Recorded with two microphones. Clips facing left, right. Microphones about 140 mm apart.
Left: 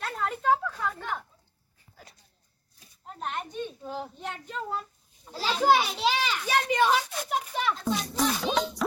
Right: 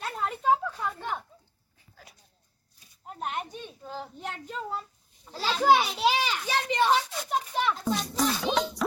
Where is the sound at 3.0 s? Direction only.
10° right (ahead or behind).